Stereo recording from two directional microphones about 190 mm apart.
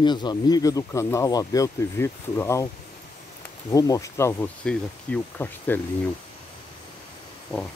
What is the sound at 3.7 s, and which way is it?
Speech, 20° left (ahead or behind).